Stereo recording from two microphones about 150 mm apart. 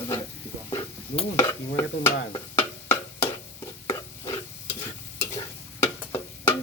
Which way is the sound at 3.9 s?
35° left (ahead or behind).